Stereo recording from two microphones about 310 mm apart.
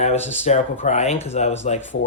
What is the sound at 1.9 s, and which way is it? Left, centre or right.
Speech, left.